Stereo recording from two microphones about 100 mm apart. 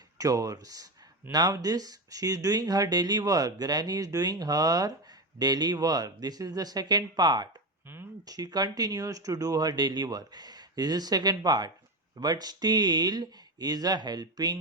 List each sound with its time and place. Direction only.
0.2 s speech: 35° right (ahead or behind)